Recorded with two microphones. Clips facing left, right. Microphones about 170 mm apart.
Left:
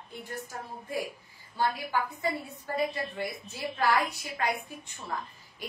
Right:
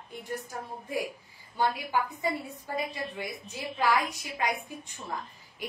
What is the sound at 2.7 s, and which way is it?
A woman's voice, 15° right (ahead or behind).